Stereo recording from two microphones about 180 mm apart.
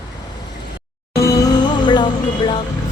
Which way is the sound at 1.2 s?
20° left (ahead or behind).